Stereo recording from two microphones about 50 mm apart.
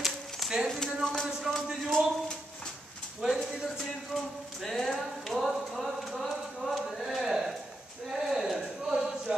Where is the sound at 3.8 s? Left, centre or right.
Centre.